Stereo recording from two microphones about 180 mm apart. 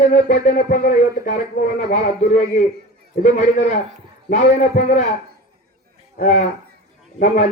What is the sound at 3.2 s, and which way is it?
A man's voice, 40° left (ahead or behind).